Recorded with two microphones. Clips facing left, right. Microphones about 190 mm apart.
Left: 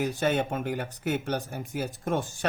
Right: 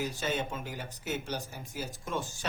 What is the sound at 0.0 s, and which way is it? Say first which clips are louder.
Speech: left 7 dB; 60° left (ahead or behind).